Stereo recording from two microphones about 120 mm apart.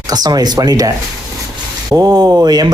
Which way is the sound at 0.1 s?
35° right (ahead or behind).